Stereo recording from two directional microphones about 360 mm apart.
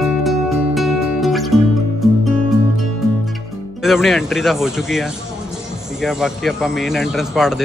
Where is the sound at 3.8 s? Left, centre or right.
Centre.